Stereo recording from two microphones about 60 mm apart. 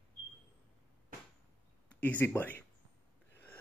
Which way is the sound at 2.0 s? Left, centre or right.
Left.